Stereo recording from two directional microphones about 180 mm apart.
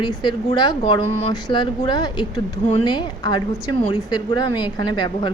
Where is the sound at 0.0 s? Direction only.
25° left (ahead or behind).